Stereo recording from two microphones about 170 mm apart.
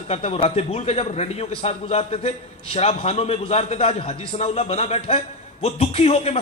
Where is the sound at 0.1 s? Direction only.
35° left (ahead or behind).